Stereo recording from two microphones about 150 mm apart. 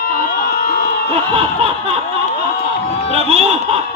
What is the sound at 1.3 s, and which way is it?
Snicker, 40° right (ahead or behind).